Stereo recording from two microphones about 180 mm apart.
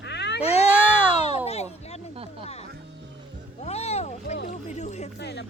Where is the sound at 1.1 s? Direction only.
35° left (ahead or behind).